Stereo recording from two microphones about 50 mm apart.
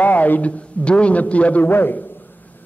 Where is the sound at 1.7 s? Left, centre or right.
Left.